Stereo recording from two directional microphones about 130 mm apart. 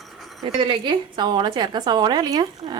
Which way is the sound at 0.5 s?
40° right (ahead or behind).